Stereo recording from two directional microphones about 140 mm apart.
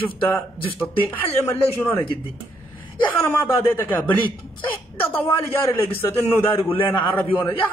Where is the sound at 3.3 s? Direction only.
15° left (ahead or behind).